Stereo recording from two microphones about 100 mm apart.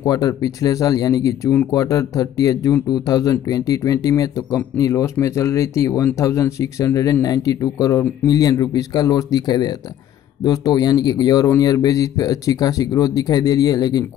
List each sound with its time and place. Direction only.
0.0 s speech: 45° left (ahead or behind)